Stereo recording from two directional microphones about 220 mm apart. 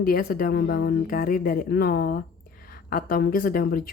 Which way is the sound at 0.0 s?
45° left (ahead or behind).